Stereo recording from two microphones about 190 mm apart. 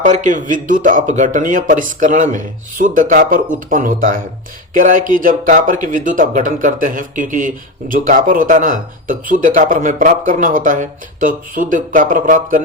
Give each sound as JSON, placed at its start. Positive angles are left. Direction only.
{"t": 0.0, "sound": "speech", "side_deg": -40}